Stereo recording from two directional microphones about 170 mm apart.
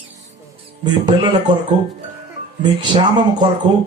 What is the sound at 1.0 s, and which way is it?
Speech, 25° right (ahead or behind).